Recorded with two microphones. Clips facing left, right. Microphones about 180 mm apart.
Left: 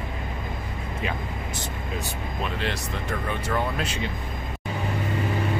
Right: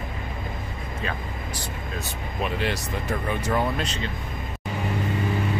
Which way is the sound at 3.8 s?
10° left (ahead or behind).